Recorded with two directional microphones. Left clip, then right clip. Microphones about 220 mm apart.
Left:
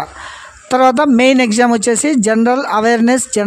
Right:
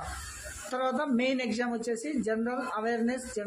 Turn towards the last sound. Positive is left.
turn(degrees=50)  # may be behind; listen again after turning